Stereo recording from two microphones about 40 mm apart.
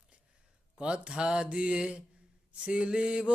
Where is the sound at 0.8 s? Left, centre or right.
Right.